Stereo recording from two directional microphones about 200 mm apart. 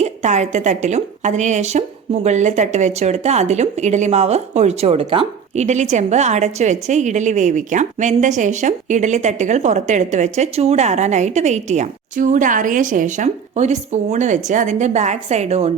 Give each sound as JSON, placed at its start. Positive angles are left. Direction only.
{"t": 0.0, "sound": "a woman's voice", "side_deg": -35}